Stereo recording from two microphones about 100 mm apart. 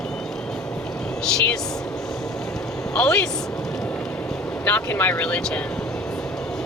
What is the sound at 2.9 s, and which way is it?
Speech, 10° left (ahead or behind).